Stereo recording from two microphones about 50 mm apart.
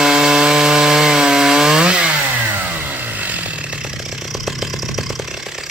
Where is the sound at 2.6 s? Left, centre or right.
Right.